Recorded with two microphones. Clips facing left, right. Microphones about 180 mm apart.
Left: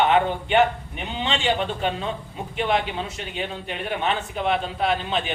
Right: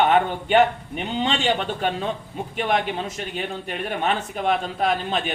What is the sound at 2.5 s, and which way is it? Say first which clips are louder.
Speech: even; 45° right (ahead or behind).